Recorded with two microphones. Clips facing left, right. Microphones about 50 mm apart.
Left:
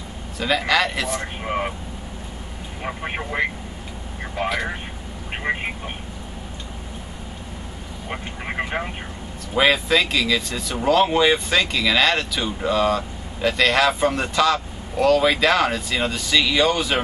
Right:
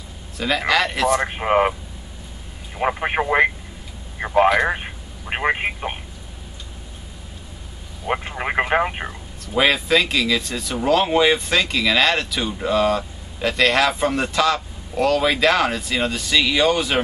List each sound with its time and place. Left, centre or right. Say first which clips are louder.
0.4 s speech: even; centre
1.2 s speech: right 7 dB; right
2.8 s speech: right 8 dB; right
5.3 s speech: right 4 dB; right
8.1 s speech: right 7 dB; right
9.6 s speech: even; centre